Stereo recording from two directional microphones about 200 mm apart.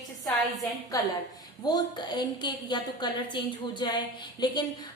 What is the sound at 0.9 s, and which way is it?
A woman's voice, 15° left (ahead or behind).